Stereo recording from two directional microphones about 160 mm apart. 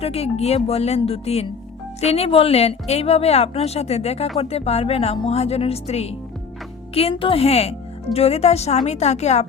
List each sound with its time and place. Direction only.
0.0 s a woman's voice: 40° left (ahead or behind)